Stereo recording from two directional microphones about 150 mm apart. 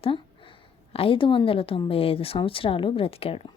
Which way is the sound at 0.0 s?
35° left (ahead or behind).